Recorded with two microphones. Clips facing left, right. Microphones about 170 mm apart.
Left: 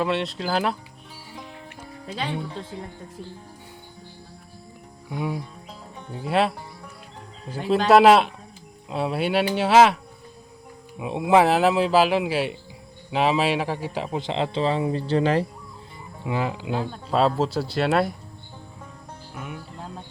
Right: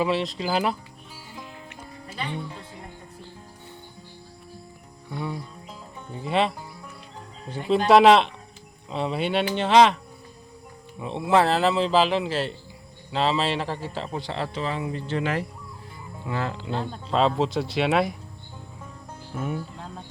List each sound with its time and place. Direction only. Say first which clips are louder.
0.0 s speech: even; centre (ahead or behind)
2.1 s speech: left 3 dB; 90° left
5.1 s speech: left 3 dB; 10° left (ahead or behind)
7.9 s speech: left 1 dB; 5° left (ahead or behind); by 15.4 s 30° left (ahead or behind)
16.2 s speech: left 3 dB; 15° left (ahead or behind)